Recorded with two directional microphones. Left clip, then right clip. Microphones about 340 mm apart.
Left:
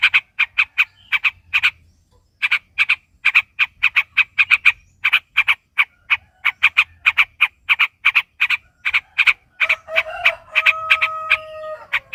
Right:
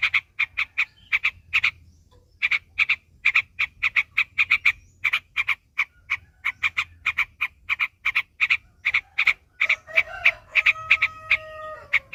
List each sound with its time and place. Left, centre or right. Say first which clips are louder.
0.0 s frog: left 7 dB; centre
11.9 s chicken: left 1 dB; centre